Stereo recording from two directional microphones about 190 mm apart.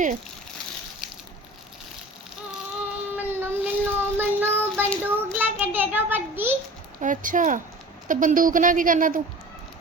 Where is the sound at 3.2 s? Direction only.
10° right (ahead or behind).